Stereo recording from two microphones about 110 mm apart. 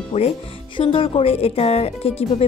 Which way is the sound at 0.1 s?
70° left (ahead or behind).